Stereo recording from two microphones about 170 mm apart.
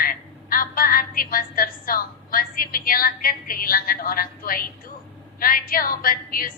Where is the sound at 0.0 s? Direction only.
55° left (ahead or behind).